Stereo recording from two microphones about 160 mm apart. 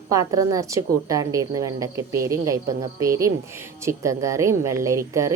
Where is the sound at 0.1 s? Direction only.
20° right (ahead or behind).